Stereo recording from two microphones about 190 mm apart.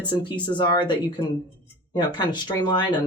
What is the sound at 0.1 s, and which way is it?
Speech, 25° left (ahead or behind).